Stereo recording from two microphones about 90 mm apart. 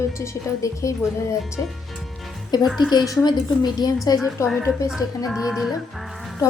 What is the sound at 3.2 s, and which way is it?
Speech, 55° left (ahead or behind).